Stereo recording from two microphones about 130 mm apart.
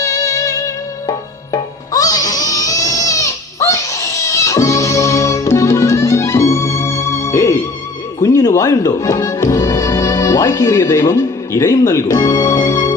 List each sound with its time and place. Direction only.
0.0 s music: 25° left (ahead or behind)
1.9 s baby cry: 30° left (ahead or behind)
8.2 s speech: 30° left (ahead or behind)